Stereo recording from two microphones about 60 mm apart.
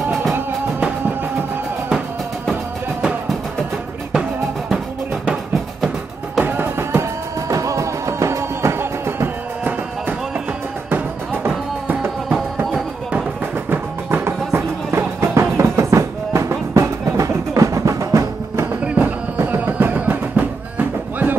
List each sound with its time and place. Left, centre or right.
6.4 s music: right
7.0 s music: right
13.7 s music: right
18.9 s music: right